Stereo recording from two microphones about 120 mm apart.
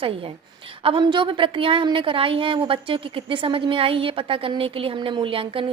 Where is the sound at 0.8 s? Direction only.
45° right (ahead or behind).